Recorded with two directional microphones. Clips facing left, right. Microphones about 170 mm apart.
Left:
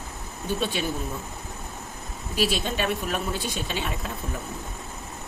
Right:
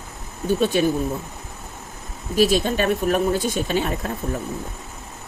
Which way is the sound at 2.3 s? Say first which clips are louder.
Right 8 dB; 45° right (ahead or behind).